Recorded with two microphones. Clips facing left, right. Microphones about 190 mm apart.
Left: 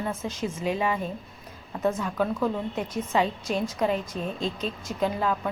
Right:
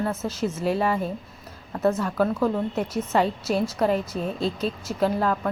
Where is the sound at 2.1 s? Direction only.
10° right (ahead or behind).